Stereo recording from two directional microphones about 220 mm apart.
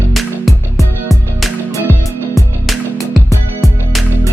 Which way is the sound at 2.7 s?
Centre (ahead or behind).